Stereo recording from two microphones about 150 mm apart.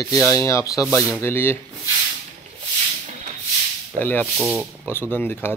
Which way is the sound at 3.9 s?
15° left (ahead or behind).